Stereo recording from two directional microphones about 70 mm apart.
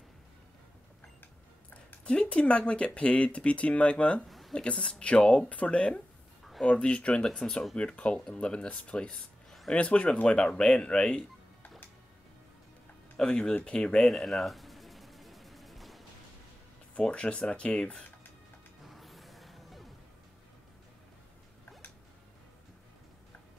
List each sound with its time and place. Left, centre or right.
2.0 s speech: centre
4.3 s a sound: centre
4.6 s speech: centre
13.2 s speech: centre
14.1 s music: centre
16.9 s speech: centre
18.9 s music: centre